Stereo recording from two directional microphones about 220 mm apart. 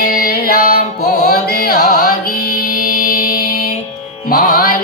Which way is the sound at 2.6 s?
40° left (ahead or behind).